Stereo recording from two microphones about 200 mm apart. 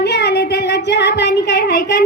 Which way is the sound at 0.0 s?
55° left (ahead or behind).